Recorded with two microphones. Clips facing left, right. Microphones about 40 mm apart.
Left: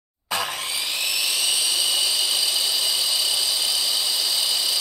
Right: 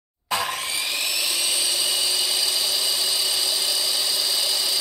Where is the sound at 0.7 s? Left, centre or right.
Centre.